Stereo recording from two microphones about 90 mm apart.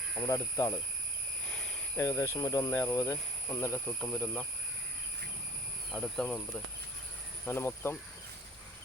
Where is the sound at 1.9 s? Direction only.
35° left (ahead or behind).